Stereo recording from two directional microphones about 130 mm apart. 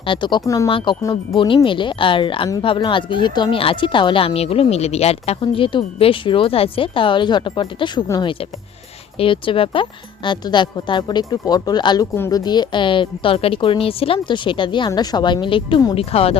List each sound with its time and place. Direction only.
0.0 s speech: 40° left (ahead or behind)
0.4 s a woman's voice: 25° left (ahead or behind)
0.7 s speech: 40° left (ahead or behind)
12.1 s a woman's voice: 20° left (ahead or behind)
12.4 s speech: 35° left (ahead or behind)